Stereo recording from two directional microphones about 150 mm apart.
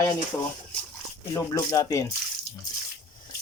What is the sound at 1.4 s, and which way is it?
Speech, 20° left (ahead or behind).